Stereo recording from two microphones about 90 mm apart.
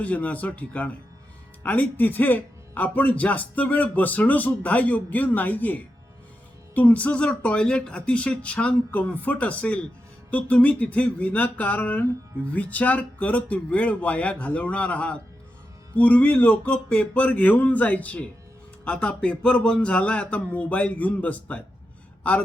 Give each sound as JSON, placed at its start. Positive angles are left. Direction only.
{"t": 0.0, "sound": "a man's voice", "side_deg": 15}